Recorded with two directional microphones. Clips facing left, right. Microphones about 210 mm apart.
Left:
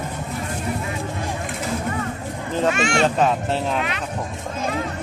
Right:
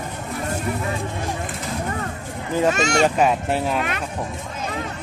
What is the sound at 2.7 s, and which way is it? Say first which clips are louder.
Speech: even; 40° right (ahead or behind).